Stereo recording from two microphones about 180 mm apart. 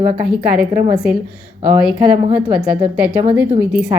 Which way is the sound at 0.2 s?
5° right (ahead or behind).